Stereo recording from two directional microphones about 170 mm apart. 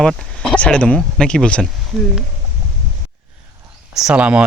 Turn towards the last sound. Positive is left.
turn(degrees=-5)  # may be behind; listen again after turning